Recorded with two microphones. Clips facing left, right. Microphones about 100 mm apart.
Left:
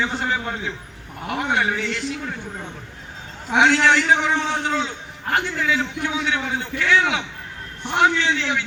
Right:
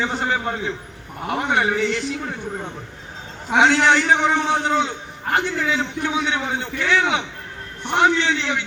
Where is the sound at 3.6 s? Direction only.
30° right (ahead or behind).